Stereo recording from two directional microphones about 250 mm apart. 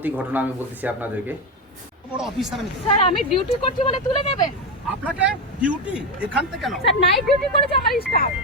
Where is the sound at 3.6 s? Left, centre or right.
Left.